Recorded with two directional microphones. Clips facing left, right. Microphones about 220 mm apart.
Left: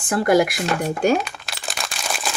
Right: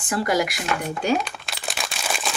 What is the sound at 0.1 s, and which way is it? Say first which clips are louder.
Speech: left 6 dB; 50° left (ahead or behind).